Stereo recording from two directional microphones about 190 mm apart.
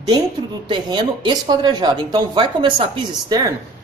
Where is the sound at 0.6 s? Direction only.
25° right (ahead or behind).